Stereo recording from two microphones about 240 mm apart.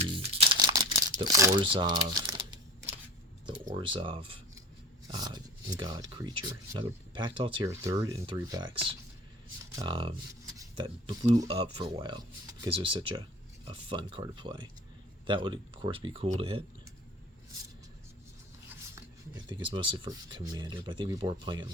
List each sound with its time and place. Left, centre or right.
0.0 s crumpling: right
1.2 s speech: centre
3.8 s speech: right
9.7 s speech: right
18.7 s speech: centre